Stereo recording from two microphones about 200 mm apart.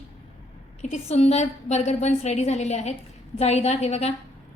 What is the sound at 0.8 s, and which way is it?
A woman's voice, 35° left (ahead or behind).